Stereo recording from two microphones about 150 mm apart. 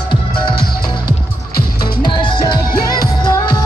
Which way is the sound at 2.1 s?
30° left (ahead or behind).